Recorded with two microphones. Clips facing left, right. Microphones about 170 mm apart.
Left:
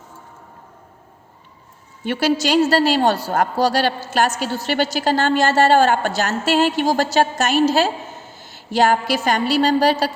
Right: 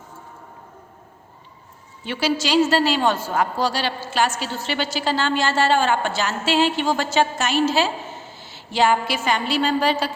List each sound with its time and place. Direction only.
2.0 s a woman's voice: 50° left (ahead or behind)
3.6 s a woman's voice: 50° left (ahead or behind)